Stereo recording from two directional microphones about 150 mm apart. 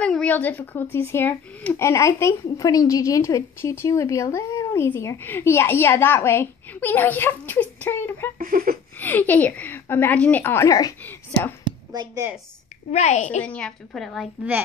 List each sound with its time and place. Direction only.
0.0 s speech: 5° left (ahead or behind)
8.4 s a sound: 70° right (ahead or behind)
8.9 s a woman's voice: 10° left (ahead or behind)
11.6 s a sound: 25° right (ahead or behind)
12.9 s a woman's voice: 50° left (ahead or behind)
13.4 s a woman's voice: 5° left (ahead or behind)